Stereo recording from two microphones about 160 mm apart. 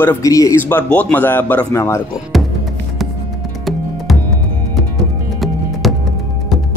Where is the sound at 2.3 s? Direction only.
Centre (ahead or behind).